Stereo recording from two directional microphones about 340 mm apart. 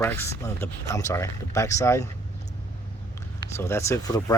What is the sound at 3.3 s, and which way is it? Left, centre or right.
Speech, centre.